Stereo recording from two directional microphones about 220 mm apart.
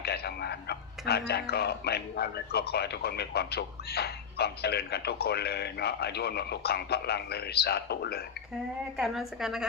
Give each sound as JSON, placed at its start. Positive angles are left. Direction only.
{"t": 0.0, "sound": "speech", "side_deg": 45}
{"t": 9.0, "sound": "a woman's voice", "side_deg": 0}